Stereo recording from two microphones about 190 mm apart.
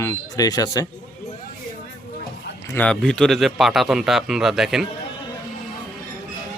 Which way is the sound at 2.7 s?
5° left (ahead or behind).